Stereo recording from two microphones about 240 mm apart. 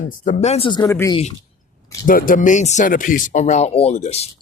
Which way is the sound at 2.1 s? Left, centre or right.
Left.